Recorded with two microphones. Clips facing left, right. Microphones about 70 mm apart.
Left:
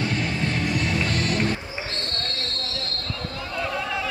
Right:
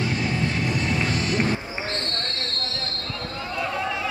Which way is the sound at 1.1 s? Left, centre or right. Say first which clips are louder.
Even; left.